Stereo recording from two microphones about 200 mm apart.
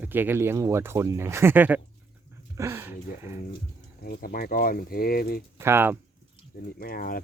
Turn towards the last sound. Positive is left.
turn(degrees=45)  # may be behind; listen again after turning